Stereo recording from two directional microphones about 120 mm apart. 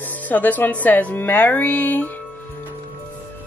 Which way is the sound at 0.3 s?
15° left (ahead or behind).